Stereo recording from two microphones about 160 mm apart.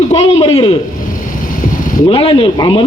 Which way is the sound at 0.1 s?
40° left (ahead or behind).